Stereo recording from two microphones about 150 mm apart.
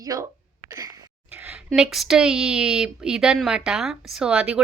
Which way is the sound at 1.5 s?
5° right (ahead or behind).